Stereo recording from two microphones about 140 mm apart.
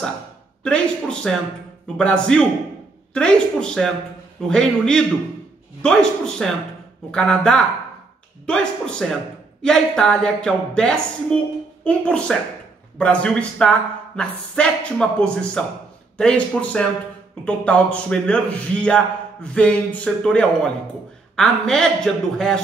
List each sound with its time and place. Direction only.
0.7 s speech: 5° left (ahead or behind)